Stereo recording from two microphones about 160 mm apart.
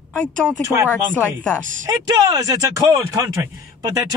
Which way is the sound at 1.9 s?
25° right (ahead or behind).